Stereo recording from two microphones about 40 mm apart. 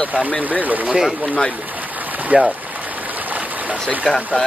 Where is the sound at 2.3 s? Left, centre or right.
Right.